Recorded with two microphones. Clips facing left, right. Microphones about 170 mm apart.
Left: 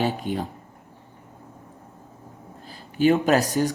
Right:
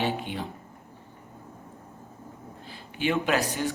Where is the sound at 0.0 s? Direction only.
40° left (ahead or behind).